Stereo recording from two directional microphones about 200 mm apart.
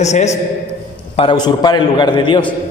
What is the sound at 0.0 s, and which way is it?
A man's voice, 35° left (ahead or behind).